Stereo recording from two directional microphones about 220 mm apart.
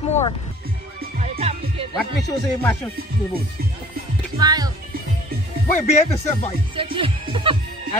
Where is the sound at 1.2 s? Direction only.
30° right (ahead or behind).